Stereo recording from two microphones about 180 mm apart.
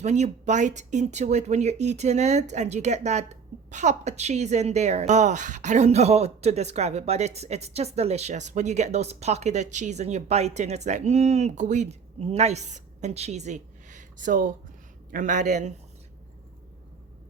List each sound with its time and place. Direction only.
0.0 s a man's voice: 40° right (ahead or behind)